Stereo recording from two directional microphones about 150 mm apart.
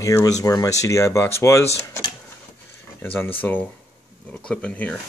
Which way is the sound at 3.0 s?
15° left (ahead or behind).